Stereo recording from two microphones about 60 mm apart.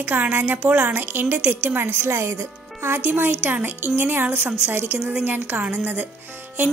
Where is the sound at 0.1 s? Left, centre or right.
Right.